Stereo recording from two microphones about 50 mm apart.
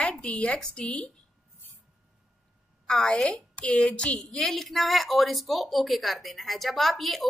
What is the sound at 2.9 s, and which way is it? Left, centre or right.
A woman's voice, centre.